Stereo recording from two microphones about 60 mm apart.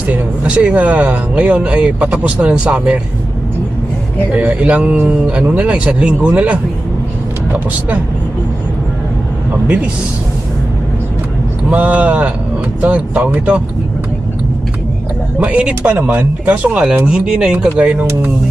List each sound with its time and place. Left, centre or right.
0.1 s speech: centre
4.4 s speech: right
11.7 s speech: right
15.4 s speech: centre
15.9 s speech: right